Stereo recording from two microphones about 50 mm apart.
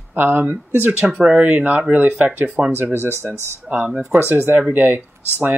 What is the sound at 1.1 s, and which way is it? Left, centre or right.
Speech, centre.